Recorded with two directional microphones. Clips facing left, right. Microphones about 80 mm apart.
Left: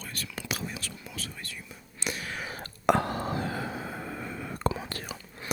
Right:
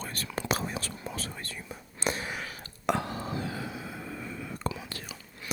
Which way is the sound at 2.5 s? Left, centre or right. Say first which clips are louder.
Left 6 dB; left.